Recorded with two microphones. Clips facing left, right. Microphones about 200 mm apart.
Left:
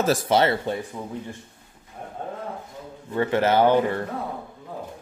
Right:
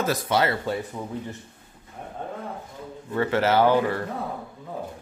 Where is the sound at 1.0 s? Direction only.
5° right (ahead or behind).